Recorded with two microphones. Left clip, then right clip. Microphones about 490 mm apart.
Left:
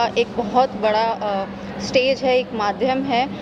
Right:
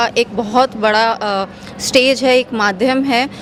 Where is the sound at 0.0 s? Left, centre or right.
Right.